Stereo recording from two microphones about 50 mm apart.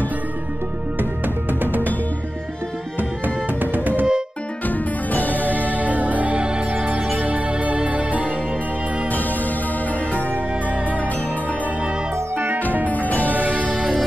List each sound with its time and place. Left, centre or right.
1.6 s music: right
3.7 s music: right
4.6 s music: left
5.7 s music: right
12.9 s music: left
13.3 s music: right